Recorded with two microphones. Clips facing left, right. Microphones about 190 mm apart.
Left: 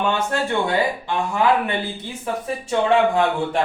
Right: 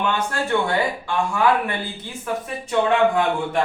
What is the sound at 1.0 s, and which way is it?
Speech, 20° left (ahead or behind).